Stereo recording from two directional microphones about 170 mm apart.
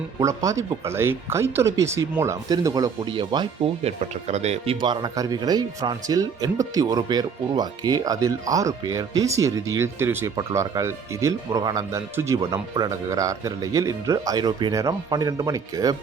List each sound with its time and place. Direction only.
0.2 s speech: 20° right (ahead or behind)
4.3 s speech: 40° right (ahead or behind); by 16.0 s 20° right (ahead or behind)